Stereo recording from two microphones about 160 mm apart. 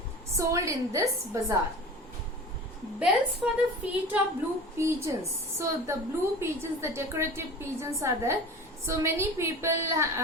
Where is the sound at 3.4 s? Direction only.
5° right (ahead or behind).